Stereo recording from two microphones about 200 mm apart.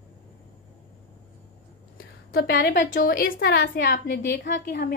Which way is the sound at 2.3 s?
55° left (ahead or behind).